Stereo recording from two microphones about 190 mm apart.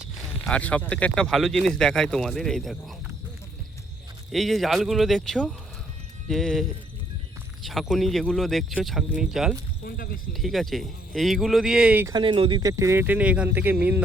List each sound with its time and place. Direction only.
0.3 s speech: 5° left (ahead or behind)
4.3 s speech: centre (ahead or behind)
9.8 s speech: 50° left (ahead or behind)
10.3 s speech: centre (ahead or behind)
12.1 s speech: 25° right (ahead or behind); by 13.7 s 10° right (ahead or behind)